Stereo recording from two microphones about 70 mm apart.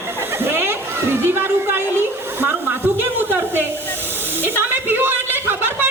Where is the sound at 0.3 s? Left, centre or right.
Right.